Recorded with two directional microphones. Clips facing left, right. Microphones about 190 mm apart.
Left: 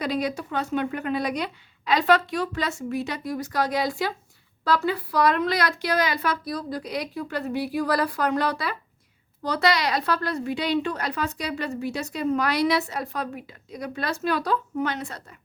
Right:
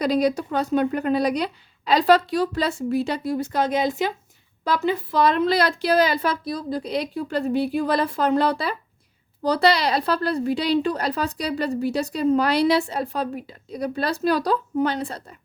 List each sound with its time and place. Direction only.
0.0 s a woman's voice: 35° right (ahead or behind)